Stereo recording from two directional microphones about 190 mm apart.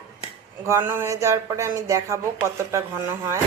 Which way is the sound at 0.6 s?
15° right (ahead or behind).